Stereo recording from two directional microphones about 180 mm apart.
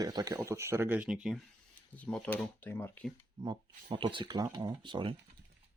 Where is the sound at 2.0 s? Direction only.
5° left (ahead or behind).